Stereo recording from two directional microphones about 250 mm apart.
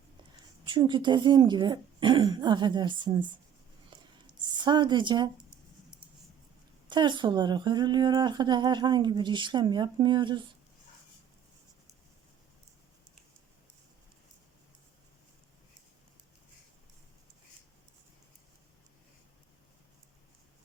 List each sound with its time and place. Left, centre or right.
0.6 s speech: centre
4.5 s a woman's voice: centre
6.8 s a woman's voice: centre